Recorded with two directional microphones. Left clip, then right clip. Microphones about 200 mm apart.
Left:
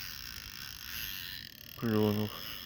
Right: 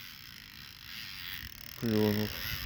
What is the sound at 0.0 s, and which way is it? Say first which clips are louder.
Mechanisms: left 4 dB; 35° left (ahead or behind).